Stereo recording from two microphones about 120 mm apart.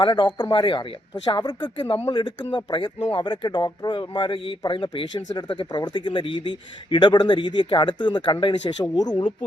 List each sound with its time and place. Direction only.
0.0 s speech: 40° left (ahead or behind)